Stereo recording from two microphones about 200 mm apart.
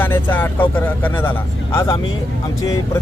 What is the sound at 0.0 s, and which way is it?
Vehicle, 10° left (ahead or behind).